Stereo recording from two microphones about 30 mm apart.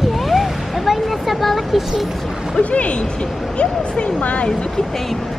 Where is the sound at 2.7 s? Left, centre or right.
Left.